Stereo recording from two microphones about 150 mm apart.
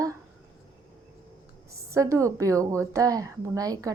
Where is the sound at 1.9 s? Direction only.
20° right (ahead or behind).